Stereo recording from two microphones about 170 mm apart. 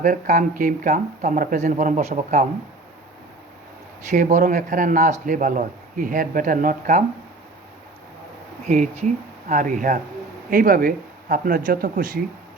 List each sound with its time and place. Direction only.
0.0 s speech: 50° right (ahead or behind)
4.1 s speech: 50° right (ahead or behind)
8.6 s speech: 45° right (ahead or behind)